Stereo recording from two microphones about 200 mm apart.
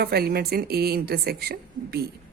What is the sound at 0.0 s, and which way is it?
A woman's voice, 50° right (ahead or behind).